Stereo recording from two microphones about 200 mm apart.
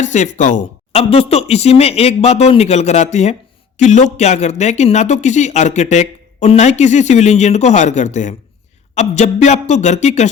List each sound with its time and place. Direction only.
0.0 s speech: 35° left (ahead or behind)